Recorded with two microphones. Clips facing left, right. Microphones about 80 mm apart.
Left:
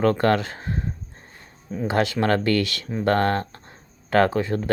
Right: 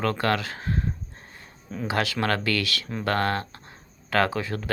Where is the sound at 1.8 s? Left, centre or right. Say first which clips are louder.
Left 4 dB; left.